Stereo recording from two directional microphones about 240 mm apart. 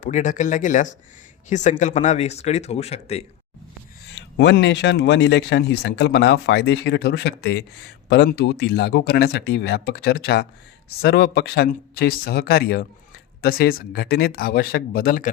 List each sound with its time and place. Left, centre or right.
0.0 s speech: left
4.1 s speech: left